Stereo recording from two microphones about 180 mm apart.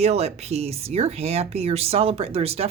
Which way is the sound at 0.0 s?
35° right (ahead or behind).